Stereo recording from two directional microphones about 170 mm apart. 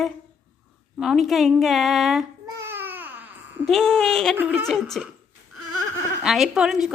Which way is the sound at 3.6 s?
5° left (ahead or behind).